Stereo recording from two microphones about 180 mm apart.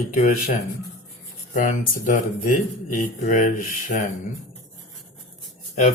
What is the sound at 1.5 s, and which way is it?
Speech, 45° left (ahead or behind).